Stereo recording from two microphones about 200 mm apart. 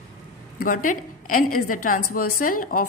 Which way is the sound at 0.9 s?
45° left (ahead or behind).